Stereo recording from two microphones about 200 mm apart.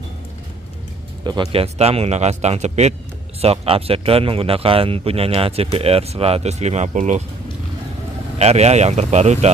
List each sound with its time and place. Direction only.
1.2 s speech: 20° right (ahead or behind); by 7.2 s 35° right (ahead or behind)
8.4 s speech: 30° right (ahead or behind)